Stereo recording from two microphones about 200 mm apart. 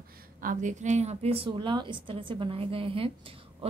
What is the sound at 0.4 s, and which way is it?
A woman's voice, 40° right (ahead or behind).